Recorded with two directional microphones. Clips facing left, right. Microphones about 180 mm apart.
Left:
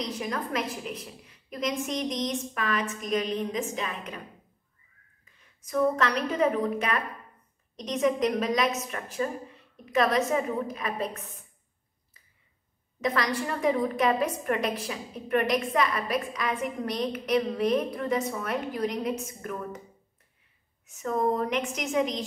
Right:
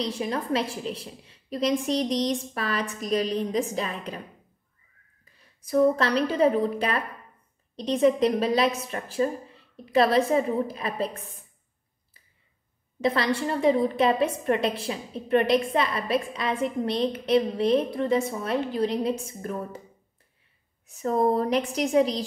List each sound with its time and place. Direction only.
0.0 s a woman's voice: 30° right (ahead or behind)
5.3 s a woman's voice: 35° right (ahead or behind)
13.0 s a woman's voice: 30° right (ahead or behind)
20.8 s a woman's voice: 35° right (ahead or behind)